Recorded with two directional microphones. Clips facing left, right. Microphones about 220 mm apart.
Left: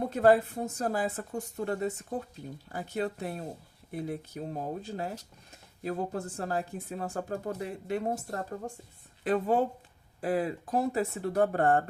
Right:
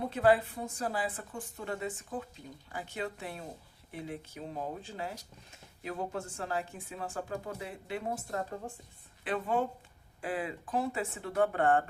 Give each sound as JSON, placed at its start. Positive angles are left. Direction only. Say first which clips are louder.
{"t": 0.1, "sound": "speech", "louder": "left 3 dB", "side_deg": 45}